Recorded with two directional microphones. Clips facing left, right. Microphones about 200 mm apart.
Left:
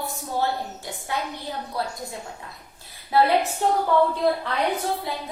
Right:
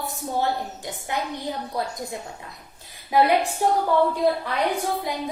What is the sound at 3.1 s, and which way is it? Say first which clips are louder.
Speech: right 1 dB; 15° right (ahead or behind).